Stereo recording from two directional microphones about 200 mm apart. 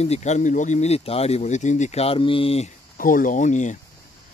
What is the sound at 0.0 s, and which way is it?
Speech, 35° left (ahead or behind).